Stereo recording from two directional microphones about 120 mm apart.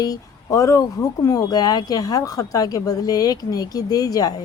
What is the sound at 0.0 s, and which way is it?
Speech, 30° left (ahead or behind).